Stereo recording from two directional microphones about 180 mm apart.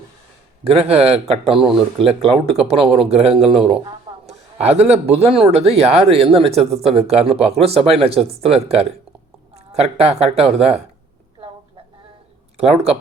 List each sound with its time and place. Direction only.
0.6 s speech: 35° right (ahead or behind)
4.1 s a sound: 25° right (ahead or behind)
4.8 s speech: 35° right (ahead or behind)
12.5 s speech: 35° right (ahead or behind)